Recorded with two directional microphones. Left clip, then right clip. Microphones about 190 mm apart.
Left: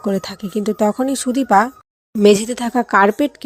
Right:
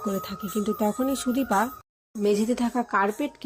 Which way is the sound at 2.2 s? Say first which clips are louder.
Left 11 dB; 45° left (ahead or behind).